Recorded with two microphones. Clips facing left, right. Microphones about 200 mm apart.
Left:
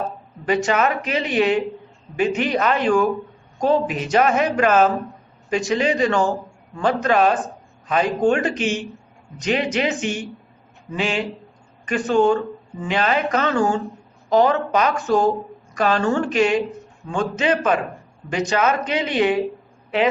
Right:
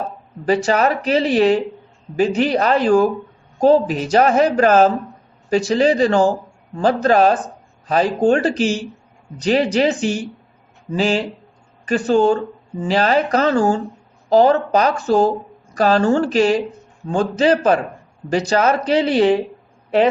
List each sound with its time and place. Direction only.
0.4 s speech: 35° right (ahead or behind)